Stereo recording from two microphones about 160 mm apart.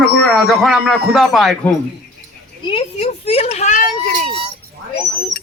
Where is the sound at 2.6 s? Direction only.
35° left (ahead or behind).